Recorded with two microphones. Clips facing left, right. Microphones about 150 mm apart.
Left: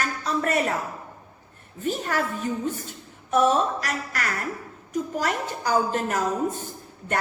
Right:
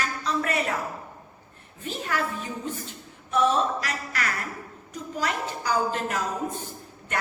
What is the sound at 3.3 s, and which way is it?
A woman's voice, 45° left (ahead or behind).